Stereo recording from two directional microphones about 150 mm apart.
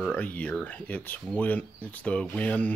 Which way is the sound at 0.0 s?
10° left (ahead or behind).